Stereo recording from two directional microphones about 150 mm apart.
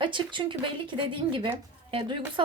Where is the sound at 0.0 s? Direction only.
35° right (ahead or behind).